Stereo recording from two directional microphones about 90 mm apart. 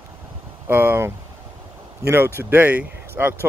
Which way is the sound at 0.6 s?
20° right (ahead or behind).